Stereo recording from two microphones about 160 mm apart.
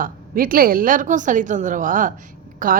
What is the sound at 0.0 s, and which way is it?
A woman's voice, 60° right (ahead or behind).